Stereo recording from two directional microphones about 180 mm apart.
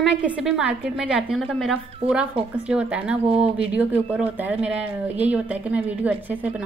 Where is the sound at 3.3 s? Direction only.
35° right (ahead or behind).